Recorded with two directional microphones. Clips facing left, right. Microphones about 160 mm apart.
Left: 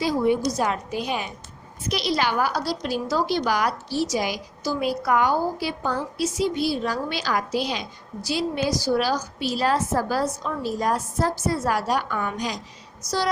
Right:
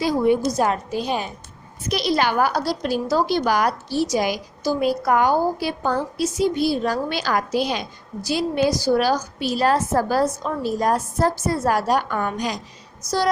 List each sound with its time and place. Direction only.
0.0 s a woman's voice: 50° right (ahead or behind); by 1.3 s 35° right (ahead or behind)
1.9 s a woman's voice: 45° right (ahead or behind)